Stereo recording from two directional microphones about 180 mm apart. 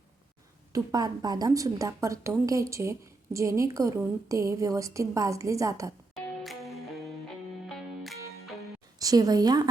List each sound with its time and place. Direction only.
0.7 s a woman's voice: 20° right (ahead or behind)
6.4 s music: centre (ahead or behind)
9.0 s a woman's voice: 20° right (ahead or behind)